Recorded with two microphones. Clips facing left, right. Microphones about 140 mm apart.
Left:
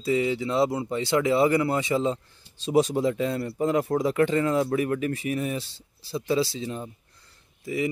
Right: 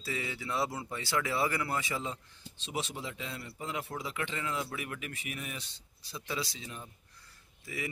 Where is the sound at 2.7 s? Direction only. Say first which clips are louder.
Left 16 dB; 40° left (ahead or behind).